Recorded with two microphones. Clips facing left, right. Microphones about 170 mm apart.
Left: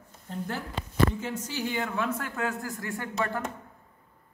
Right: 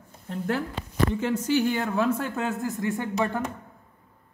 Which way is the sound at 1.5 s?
70° right (ahead or behind).